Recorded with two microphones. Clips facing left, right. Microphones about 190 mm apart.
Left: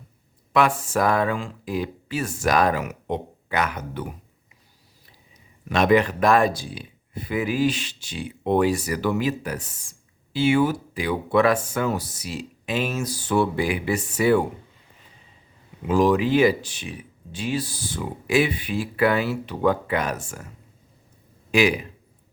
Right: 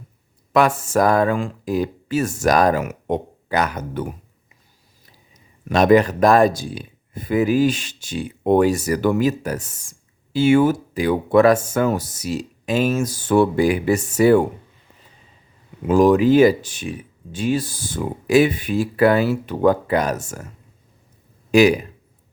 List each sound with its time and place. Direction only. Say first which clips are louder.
0.5 s speech: right 4 dB; 45° right (ahead or behind)
5.6 s speech: right 5 dB; 40° right (ahead or behind)
15.9 s speech: right 5 dB; 45° right (ahead or behind)
21.5 s speech: right 7 dB; 40° right (ahead or behind)